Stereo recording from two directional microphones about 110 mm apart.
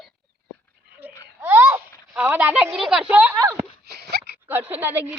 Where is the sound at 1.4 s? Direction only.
20° right (ahead or behind).